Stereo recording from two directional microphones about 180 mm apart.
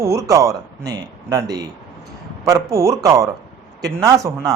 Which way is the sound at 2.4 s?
15° right (ahead or behind).